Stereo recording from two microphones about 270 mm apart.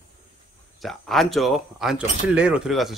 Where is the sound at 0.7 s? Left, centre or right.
Centre.